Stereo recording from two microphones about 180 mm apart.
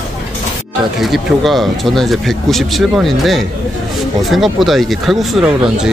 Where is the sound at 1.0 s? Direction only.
Centre (ahead or behind).